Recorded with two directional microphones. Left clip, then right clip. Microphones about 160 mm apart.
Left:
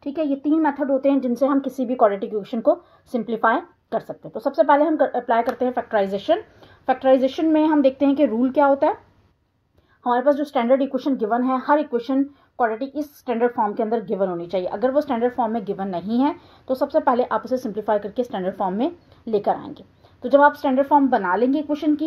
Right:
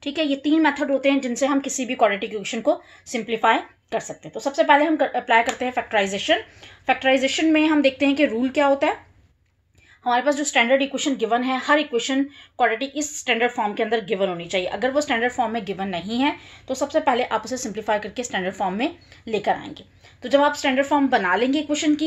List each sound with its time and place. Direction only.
0.0 s a woman's voice: 35° left (ahead or behind); by 8.9 s 55° left (ahead or behind)
10.0 s a woman's voice: 55° left (ahead or behind)